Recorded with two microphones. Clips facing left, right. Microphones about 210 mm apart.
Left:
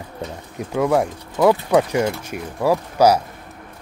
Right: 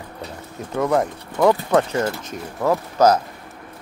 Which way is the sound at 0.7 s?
5° left (ahead or behind).